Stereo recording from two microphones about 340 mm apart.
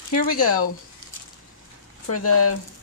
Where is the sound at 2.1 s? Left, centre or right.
Left.